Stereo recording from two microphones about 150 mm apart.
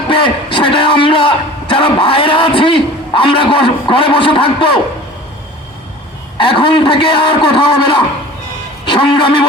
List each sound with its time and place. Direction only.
0.1 s a man's voice: 35° left (ahead or behind)
6.3 s a man's voice: 35° left (ahead or behind)